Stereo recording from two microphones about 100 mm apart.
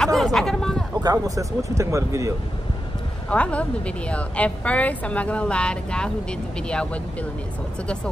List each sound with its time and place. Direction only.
0.0 s a sound: 5° left (ahead or behind)
1.0 s speech: 35° right (ahead or behind)
3.3 s a woman's voice: 10° left (ahead or behind)